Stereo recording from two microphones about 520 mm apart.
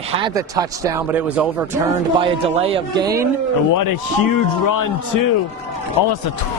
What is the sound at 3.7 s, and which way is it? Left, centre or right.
A man's voice, left.